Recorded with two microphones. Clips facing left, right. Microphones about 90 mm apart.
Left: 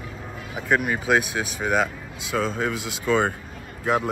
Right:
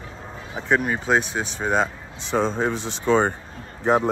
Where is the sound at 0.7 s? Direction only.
5° left (ahead or behind).